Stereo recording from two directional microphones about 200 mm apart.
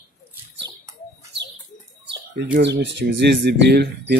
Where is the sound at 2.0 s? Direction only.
60° right (ahead or behind).